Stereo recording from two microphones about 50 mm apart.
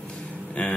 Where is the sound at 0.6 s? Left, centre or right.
Left.